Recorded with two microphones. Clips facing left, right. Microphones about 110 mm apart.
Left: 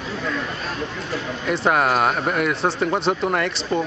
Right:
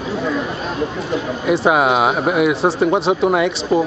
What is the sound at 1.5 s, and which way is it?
A man's voice, 5° right (ahead or behind).